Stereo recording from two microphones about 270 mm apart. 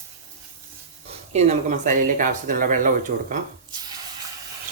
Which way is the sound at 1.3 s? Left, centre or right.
Right.